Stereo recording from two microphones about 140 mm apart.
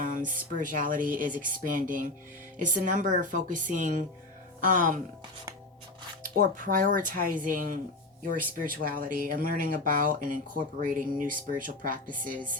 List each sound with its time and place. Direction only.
0.0 s speech: 75° right (ahead or behind)
6.2 s speech: 80° right
8.5 s speech: 85° right
10.8 s speech: 70° right (ahead or behind)